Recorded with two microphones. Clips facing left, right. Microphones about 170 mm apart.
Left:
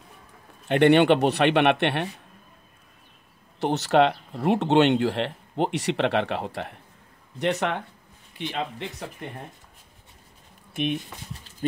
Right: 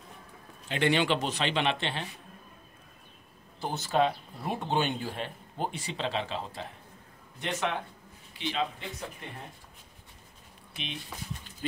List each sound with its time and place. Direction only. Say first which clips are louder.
0.7 s a man's voice: left 10 dB; 60° left (ahead or behind)
3.5 s a man's voice: left 8 dB; 75° left (ahead or behind)
8.4 s a man's voice: left 2 dB; 55° left (ahead or behind)
10.7 s speech: left 15 dB; 55° left (ahead or behind)